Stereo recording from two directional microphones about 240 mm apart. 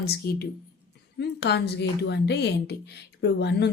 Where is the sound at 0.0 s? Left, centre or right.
Left.